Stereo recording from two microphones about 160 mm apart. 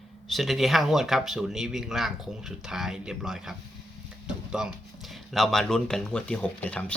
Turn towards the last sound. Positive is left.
turn(degrees=10)  # may be behind; listen again after turning